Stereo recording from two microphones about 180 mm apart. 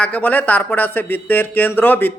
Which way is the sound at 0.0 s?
10° left (ahead or behind).